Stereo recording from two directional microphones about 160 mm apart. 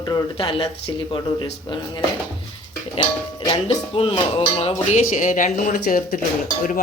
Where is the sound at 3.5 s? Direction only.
35° left (ahead or behind).